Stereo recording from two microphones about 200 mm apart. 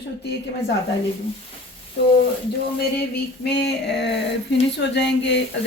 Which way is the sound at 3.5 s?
55° left (ahead or behind).